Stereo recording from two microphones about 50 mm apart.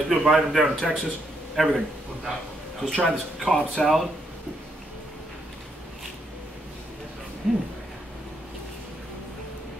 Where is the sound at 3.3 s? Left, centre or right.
Centre.